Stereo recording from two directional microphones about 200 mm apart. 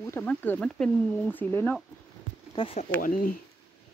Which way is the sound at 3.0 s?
45° left (ahead or behind).